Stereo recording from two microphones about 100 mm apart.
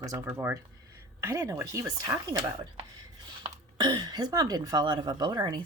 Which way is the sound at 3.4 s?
50° right (ahead or behind).